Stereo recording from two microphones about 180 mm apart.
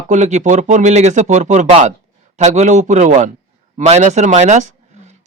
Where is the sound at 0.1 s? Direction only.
40° right (ahead or behind).